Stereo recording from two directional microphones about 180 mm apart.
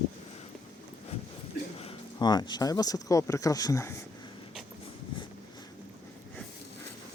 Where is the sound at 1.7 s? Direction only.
30° left (ahead or behind).